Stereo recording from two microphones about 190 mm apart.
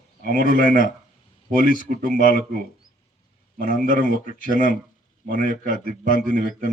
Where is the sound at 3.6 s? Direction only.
45° right (ahead or behind).